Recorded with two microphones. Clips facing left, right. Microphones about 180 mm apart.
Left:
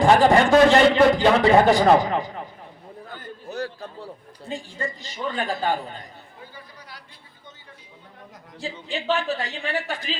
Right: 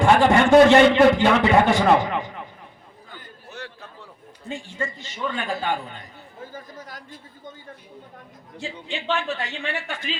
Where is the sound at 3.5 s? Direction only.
35° left (ahead or behind).